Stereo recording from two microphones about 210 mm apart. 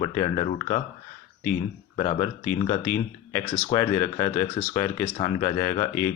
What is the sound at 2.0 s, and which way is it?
Speech, 25° left (ahead or behind).